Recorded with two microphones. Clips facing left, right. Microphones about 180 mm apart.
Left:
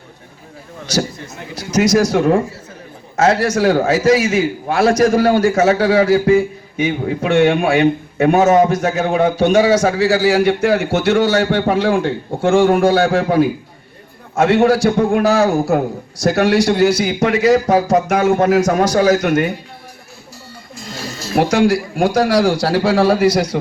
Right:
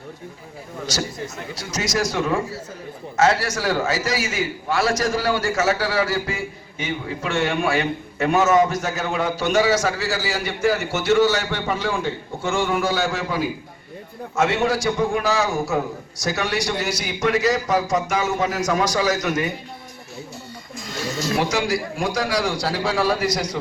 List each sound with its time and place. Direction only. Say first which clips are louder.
1.7 s a man's voice: left 10 dB; 60° left (ahead or behind)
20.9 s music: right 3 dB; 30° left (ahead or behind)
21.3 s a man's voice: left 10 dB; 55° left (ahead or behind)